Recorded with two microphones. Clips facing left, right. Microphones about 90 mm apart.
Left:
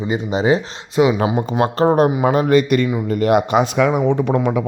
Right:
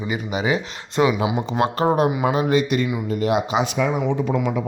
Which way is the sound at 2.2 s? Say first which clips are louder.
Left 5 dB; 50° left (ahead or behind).